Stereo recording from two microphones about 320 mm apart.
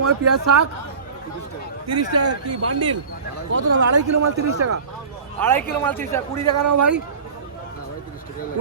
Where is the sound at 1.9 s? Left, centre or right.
Right.